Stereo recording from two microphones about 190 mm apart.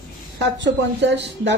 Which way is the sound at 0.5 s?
70° right (ahead or behind).